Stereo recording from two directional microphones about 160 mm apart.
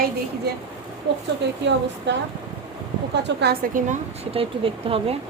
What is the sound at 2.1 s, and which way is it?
Speech, 90° right.